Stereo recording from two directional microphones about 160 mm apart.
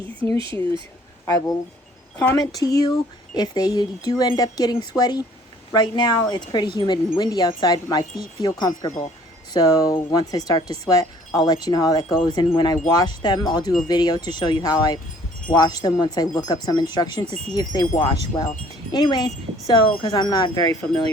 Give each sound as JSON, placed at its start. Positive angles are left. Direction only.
{"t": 2.1, "sound": "speech", "side_deg": 20}